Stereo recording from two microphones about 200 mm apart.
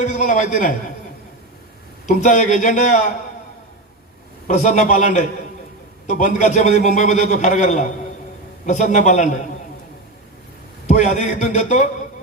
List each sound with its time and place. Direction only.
0.0 s a man's voice: 35° left (ahead or behind)
2.0 s a man's voice: 40° left (ahead or behind)
4.4 s a man's voice: 40° left (ahead or behind)
10.8 s a man's voice: 35° left (ahead or behind)